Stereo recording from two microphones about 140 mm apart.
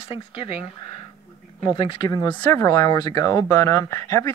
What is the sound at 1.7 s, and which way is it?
Speech, 35° left (ahead or behind).